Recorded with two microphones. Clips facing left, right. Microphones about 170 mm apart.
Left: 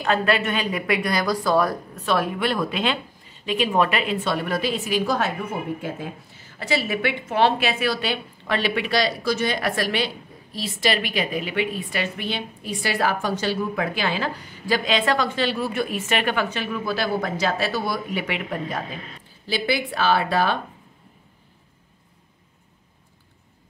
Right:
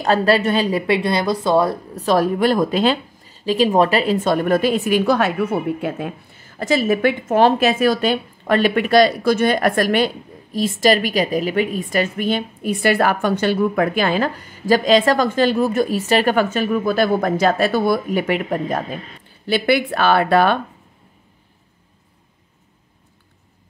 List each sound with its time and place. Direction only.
0.0 s a woman's voice: 35° right (ahead or behind)
19.4 s speech: 60° right (ahead or behind)